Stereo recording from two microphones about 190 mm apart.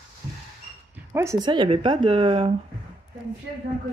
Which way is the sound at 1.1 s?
20° right (ahead or behind).